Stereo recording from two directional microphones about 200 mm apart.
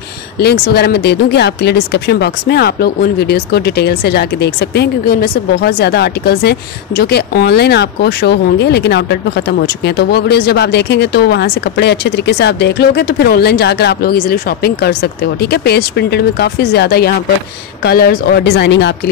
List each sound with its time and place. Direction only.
0.4 s speech: 55° left (ahead or behind)